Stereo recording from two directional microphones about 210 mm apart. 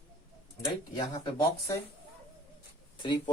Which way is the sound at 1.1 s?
15° left (ahead or behind).